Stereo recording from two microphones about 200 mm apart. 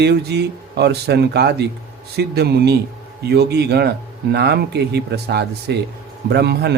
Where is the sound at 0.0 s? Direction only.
55° right (ahead or behind).